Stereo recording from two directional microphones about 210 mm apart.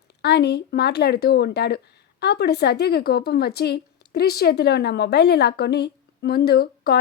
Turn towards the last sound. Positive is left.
turn(degrees=50)  # may be behind; listen again after turning